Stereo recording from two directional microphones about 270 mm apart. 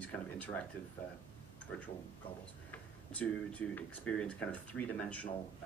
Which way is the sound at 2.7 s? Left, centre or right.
Centre.